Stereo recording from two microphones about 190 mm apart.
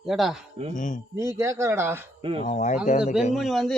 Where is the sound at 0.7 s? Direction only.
40° left (ahead or behind).